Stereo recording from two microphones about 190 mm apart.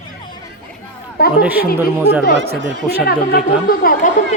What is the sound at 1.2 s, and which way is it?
Speech, 55° left (ahead or behind).